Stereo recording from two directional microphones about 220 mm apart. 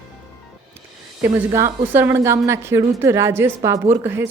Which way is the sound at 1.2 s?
10° right (ahead or behind).